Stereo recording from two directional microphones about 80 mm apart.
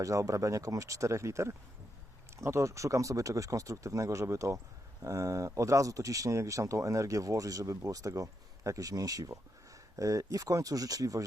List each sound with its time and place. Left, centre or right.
0.0 s speech: right